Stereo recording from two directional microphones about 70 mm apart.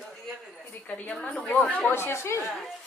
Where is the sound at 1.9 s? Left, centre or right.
Left.